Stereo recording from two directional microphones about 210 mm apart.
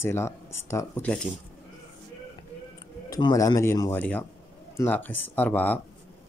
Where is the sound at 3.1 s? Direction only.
20° left (ahead or behind).